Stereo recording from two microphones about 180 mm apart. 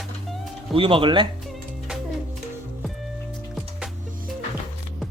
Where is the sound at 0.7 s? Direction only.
30° right (ahead or behind).